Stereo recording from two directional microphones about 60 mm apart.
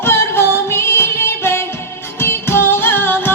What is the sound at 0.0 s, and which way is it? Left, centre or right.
Music, left.